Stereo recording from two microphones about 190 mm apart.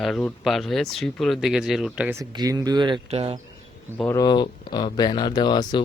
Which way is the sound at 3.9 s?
10° left (ahead or behind).